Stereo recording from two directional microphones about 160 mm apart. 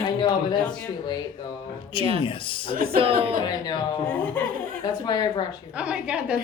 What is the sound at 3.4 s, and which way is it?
Speech, 25° left (ahead or behind).